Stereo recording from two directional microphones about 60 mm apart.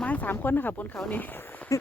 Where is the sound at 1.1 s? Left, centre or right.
Left.